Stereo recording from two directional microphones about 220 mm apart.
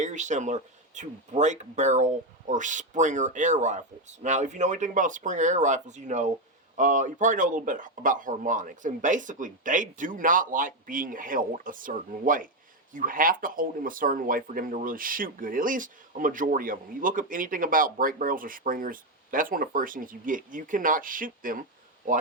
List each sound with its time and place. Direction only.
0.0 s speech: 35° right (ahead or behind)